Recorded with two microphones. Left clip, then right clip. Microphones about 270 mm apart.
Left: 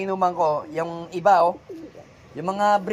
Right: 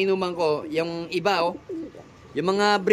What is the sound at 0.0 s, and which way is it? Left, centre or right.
Speech, centre.